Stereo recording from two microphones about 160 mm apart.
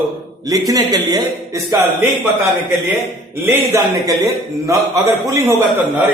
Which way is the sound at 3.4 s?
15° right (ahead or behind).